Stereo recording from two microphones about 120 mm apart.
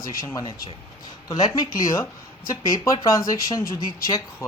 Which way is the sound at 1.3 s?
35° left (ahead or behind).